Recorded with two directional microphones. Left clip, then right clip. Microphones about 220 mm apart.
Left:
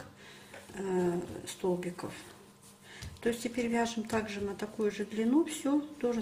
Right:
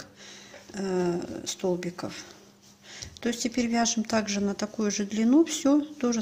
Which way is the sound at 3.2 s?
45° right (ahead or behind).